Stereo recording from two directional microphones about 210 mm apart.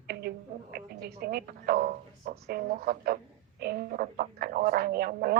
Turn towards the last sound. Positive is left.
turn(degrees=-45)  # may be behind; listen again after turning